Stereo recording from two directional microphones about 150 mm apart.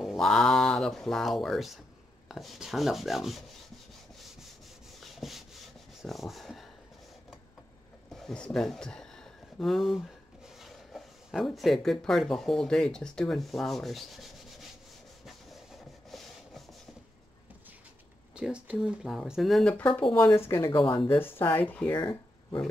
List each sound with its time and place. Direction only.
0.0 s speech: centre (ahead or behind)
5.0 s rub: centre (ahead or behind)
6.0 s speech: centre (ahead or behind)
8.1 s a sound: 5° left (ahead or behind)
10.6 s speech: centre (ahead or behind)
15.2 s rub: centre (ahead or behind)
18.3 s speech: 5° right (ahead or behind)
19.9 s speech: 35° left (ahead or behind)
20.4 s speech: 15° left (ahead or behind)
21.9 s a sound: 30° left (ahead or behind)